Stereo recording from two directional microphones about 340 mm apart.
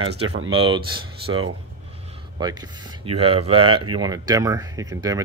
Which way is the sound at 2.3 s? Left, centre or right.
Centre.